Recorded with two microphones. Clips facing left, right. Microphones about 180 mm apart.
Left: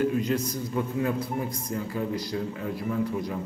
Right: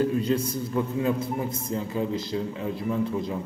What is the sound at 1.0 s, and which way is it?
A man's voice, 25° right (ahead or behind).